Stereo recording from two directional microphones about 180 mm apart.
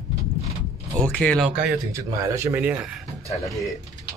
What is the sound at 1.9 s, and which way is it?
Speech, 15° right (ahead or behind).